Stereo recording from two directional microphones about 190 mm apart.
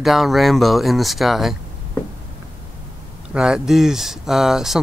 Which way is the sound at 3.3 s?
5° right (ahead or behind).